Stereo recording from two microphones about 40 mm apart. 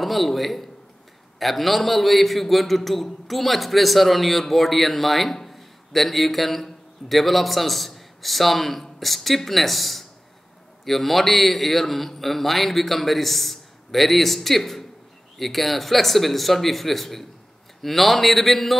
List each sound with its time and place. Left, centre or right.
0.0 s a man's voice: centre